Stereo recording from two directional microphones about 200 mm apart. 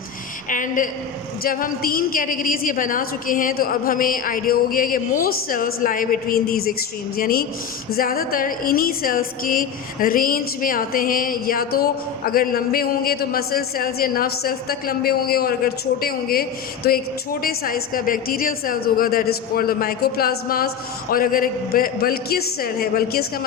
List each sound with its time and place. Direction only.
0.5 s a woman's voice: 40° left (ahead or behind)